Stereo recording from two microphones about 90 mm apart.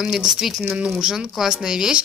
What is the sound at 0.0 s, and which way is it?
Speech, 5° right (ahead or behind).